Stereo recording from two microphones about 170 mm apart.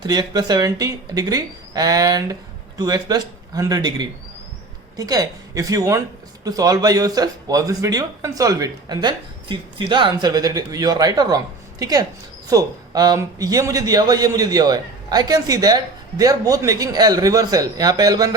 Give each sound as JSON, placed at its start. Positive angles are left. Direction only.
{"t": 0.0, "sound": "a man's voice", "side_deg": -25}